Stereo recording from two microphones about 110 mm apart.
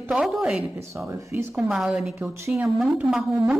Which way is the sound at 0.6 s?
25° right (ahead or behind).